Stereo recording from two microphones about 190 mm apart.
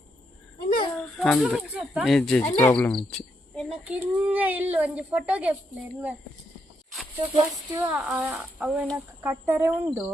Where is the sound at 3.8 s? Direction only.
10° right (ahead or behind).